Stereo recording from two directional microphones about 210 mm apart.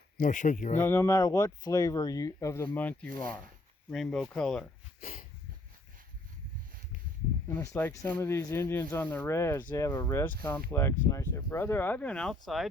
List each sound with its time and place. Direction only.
0.2 s speech: 35° left (ahead or behind)
0.8 s speech: 15° left (ahead or behind)
4.9 s a sound: 40° left (ahead or behind)
7.5 s speech: 10° left (ahead or behind)